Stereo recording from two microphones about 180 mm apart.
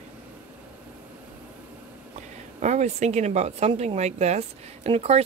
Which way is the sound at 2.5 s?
40° right (ahead or behind).